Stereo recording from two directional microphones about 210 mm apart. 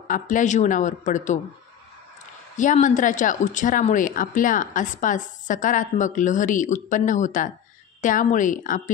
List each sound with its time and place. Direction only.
0.1 s speech: 35° left (ahead or behind)
2.5 s speech: 35° left (ahead or behind)